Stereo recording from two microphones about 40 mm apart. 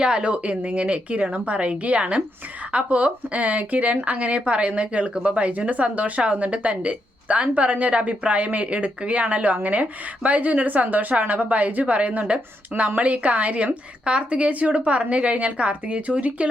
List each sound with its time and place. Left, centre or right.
0.0 s a woman's voice: right
14.0 s a woman's voice: right